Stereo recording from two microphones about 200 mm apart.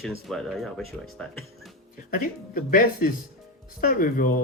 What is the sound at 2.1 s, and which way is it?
Speech, 45° left (ahead or behind).